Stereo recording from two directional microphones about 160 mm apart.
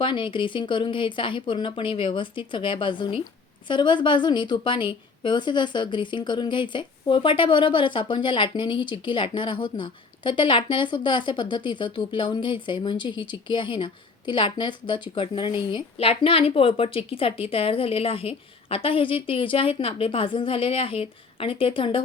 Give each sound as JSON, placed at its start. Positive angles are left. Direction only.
{"t": 0.0, "sound": "a woman's voice", "side_deg": 30}